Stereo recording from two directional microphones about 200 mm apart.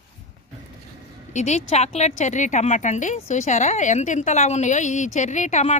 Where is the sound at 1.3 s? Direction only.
35° left (ahead or behind).